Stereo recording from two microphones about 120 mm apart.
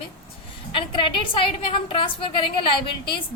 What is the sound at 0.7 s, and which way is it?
A woman's voice, 45° left (ahead or behind).